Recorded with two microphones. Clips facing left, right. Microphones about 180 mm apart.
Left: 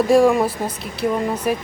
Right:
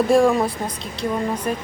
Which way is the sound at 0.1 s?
Centre (ahead or behind).